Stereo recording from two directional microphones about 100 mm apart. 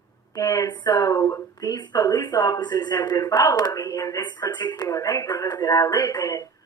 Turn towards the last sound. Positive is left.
turn(degrees=40)  # may be behind; listen again after turning